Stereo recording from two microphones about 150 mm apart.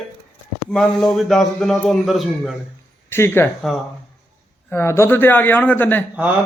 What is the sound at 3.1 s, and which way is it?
Speech, 15° left (ahead or behind).